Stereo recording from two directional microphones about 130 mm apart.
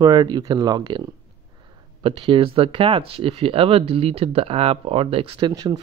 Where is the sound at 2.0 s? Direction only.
45° right (ahead or behind).